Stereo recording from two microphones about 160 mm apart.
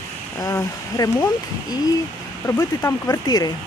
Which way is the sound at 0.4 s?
20° left (ahead or behind).